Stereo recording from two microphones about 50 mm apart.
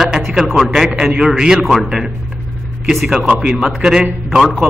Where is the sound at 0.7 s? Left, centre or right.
Centre.